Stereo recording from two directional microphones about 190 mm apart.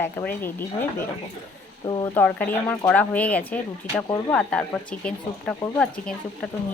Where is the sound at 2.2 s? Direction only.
5° left (ahead or behind).